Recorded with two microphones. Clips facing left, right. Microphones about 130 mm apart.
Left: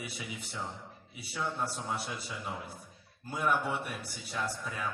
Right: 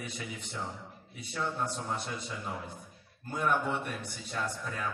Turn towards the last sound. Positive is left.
turn(degrees=5)  # may be behind; listen again after turning